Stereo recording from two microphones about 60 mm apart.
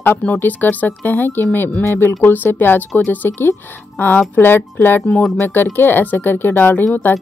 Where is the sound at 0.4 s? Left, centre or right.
Left.